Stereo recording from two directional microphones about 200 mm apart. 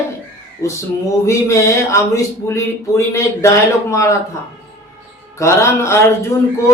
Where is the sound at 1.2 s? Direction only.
15° left (ahead or behind).